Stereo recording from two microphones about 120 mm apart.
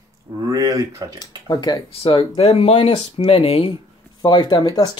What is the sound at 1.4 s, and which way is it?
Speech, 35° left (ahead or behind).